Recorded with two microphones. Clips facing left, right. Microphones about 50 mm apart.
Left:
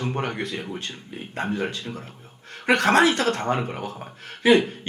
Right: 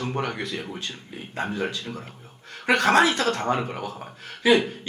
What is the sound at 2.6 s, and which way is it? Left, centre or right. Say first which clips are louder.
Speech: left 1 dB; left.